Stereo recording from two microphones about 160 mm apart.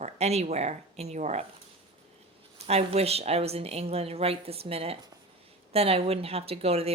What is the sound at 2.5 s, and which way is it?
A woman's voice, 40° right (ahead or behind).